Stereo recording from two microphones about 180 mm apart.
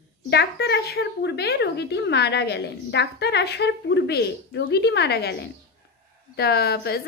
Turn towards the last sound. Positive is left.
turn(degrees=65)  # may be behind; listen again after turning